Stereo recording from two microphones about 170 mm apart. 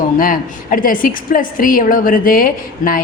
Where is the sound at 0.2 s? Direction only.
55° left (ahead or behind).